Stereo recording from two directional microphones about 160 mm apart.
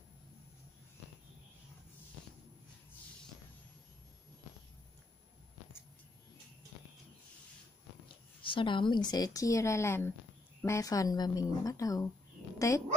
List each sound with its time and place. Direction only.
8.4 s speech: 30° left (ahead or behind)